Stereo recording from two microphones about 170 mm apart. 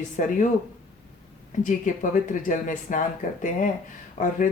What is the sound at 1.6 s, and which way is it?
Speech, 50° left (ahead or behind).